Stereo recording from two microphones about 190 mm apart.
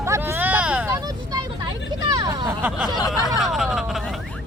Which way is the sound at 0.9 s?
20° right (ahead or behind).